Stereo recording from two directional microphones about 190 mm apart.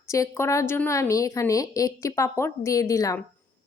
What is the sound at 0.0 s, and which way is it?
A woman's voice, 15° left (ahead or behind).